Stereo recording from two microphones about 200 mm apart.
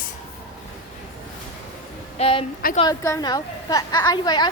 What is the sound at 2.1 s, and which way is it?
Speech, 30° left (ahead or behind).